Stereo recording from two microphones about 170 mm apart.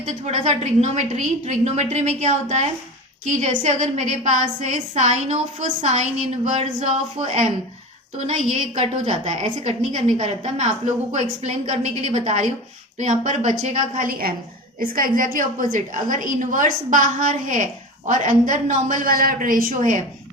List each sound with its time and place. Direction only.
0.0 s a woman's voice: 40° right (ahead or behind)
8.7 s a woman's voice: 40° right (ahead or behind)